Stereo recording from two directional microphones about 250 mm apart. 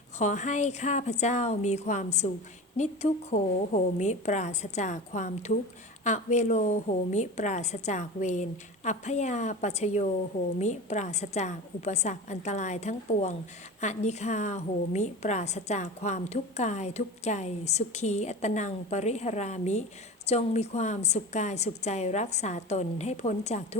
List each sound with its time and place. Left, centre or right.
0.2 s a woman's voice: left